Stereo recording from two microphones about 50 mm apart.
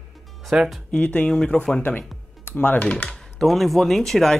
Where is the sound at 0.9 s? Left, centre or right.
Left.